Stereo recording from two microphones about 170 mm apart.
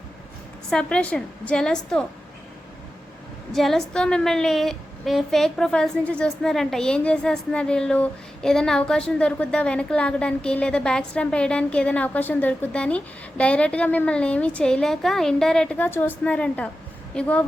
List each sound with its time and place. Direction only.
0.7 s a woman's voice: 5° left (ahead or behind)
3.5 s a woman's voice: centre (ahead or behind)